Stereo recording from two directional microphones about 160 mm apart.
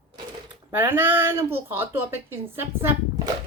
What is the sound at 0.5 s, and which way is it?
Speech, 15° right (ahead or behind).